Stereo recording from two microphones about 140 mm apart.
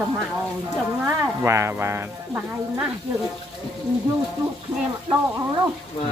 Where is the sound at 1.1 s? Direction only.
20° right (ahead or behind).